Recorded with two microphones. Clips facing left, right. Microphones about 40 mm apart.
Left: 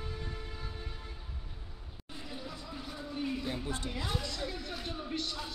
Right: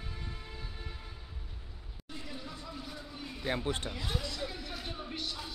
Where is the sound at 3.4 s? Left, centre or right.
Right.